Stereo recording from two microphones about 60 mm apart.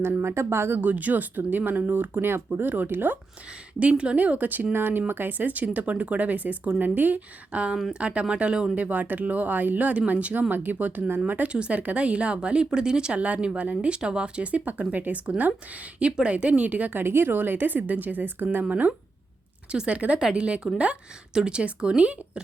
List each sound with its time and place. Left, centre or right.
0.2 s speech: right
0.8 s speech: right
3.8 s speech: centre
8.7 s speech: right
17.0 s speech: right